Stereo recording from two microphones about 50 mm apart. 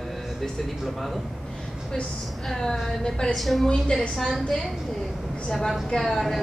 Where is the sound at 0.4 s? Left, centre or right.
Centre.